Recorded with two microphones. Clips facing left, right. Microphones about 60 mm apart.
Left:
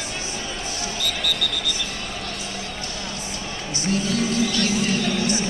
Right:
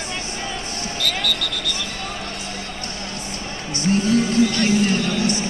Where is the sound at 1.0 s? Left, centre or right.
Right.